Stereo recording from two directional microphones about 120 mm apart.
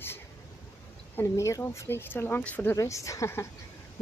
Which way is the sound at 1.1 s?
25° left (ahead or behind).